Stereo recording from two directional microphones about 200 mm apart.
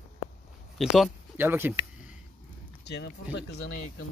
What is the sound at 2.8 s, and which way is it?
Speech, 55° left (ahead or behind).